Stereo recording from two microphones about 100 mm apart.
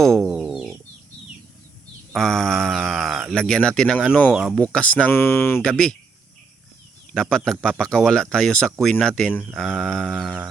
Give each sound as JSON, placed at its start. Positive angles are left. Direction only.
{"t": 0.0, "sound": "chicken", "side_deg": 0}
{"t": 2.1, "sound": "speech", "side_deg": 5}
{"t": 5.6, "sound": "speech", "side_deg": 10}
{"t": 7.1, "sound": "speech", "side_deg": 5}
{"t": 9.5, "sound": "a sound", "side_deg": 5}